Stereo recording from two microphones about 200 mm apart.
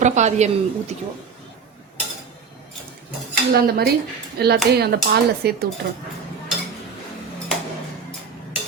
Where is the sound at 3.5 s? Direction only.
50° right (ahead or behind).